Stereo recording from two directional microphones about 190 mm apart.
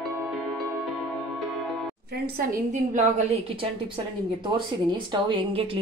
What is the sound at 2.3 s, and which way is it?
A woman's voice, 40° right (ahead or behind).